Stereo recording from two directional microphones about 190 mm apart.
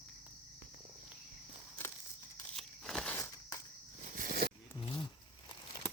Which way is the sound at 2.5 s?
Centre (ahead or behind).